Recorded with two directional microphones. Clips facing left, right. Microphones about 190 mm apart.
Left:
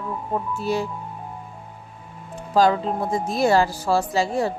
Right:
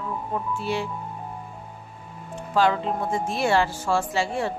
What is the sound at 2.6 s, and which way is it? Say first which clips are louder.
Speech: left 3 dB; 35° left (ahead or behind).